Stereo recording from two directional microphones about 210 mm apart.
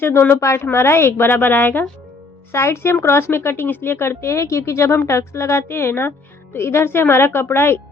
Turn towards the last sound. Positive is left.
turn(degrees=10)  # may be behind; listen again after turning